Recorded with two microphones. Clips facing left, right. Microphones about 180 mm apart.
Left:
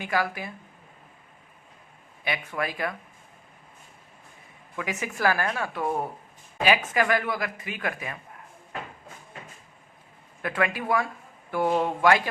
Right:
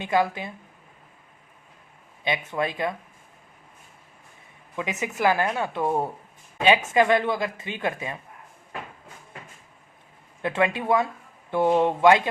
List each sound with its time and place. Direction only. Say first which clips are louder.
0.0 s speech: right 4 dB; 25° right (ahead or behind)
2.2 s speech: right 3 dB; 20° right (ahead or behind)
4.8 s speech: right 2 dB; 20° right (ahead or behind)
10.4 s speech: right 3 dB; 25° right (ahead or behind)